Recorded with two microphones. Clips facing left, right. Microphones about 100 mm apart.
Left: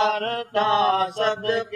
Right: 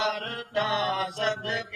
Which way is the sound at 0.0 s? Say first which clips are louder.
Left 8 dB; 60° left (ahead or behind).